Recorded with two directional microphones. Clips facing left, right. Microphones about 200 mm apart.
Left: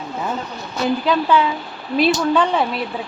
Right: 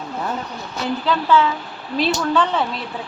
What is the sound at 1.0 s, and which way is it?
Speech, 15° left (ahead or behind).